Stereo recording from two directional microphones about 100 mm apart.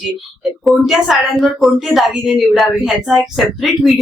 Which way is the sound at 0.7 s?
Centre (ahead or behind).